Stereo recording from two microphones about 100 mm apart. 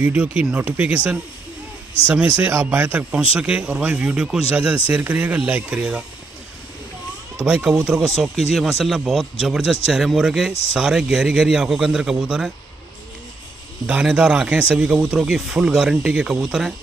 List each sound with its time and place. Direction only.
0.0 s speech: 15° right (ahead or behind)
2.4 s speech: 25° right (ahead or behind)
7.4 s a man's voice: 5° right (ahead or behind)
13.8 s speech: 10° right (ahead or behind)